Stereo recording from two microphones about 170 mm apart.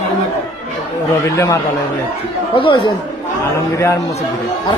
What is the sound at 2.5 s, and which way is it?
Speech, 30° left (ahead or behind).